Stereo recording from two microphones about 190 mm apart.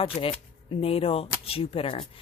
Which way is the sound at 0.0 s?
30° left (ahead or behind).